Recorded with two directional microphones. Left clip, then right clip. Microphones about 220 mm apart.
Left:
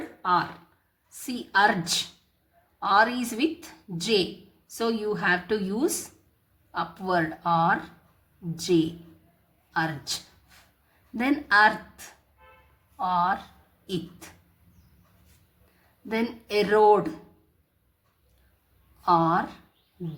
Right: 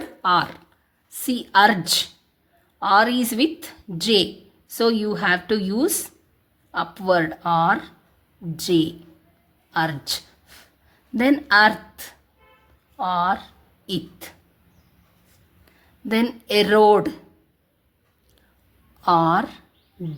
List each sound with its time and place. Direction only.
0.2 s a woman's voice: 40° right (ahead or behind)
13.0 s a woman's voice: 30° right (ahead or behind)
16.0 s a woman's voice: 40° right (ahead or behind)
19.0 s a woman's voice: 35° right (ahead or behind)